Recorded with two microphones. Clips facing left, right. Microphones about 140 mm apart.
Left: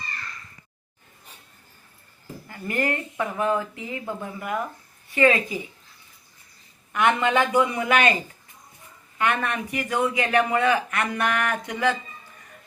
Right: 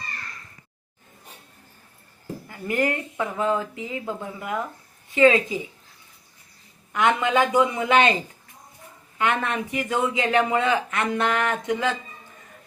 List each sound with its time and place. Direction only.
2.5 s a man's voice: 15° right (ahead or behind)
6.9 s a man's voice: 15° right (ahead or behind)